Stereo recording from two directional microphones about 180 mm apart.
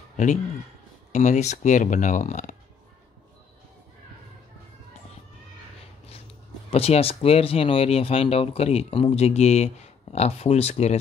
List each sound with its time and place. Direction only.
1.1 s speech: 40° left (ahead or behind)
6.7 s speech: 35° left (ahead or behind)